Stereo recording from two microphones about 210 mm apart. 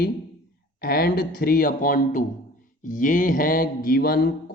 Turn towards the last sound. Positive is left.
turn(degrees=45)  # may be behind; listen again after turning